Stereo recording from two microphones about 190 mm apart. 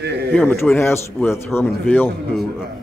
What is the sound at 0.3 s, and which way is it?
A man's voice, 5° left (ahead or behind).